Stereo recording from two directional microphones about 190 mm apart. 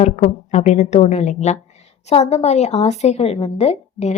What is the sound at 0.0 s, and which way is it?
A woman's voice, 40° left (ahead or behind).